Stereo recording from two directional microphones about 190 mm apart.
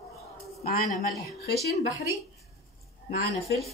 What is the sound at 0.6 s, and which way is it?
Speech, 45° left (ahead or behind).